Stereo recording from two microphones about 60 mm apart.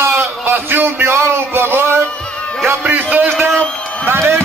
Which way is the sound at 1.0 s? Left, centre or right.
Right.